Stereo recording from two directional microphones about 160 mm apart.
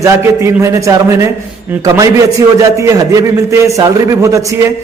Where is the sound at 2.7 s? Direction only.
20° right (ahead or behind).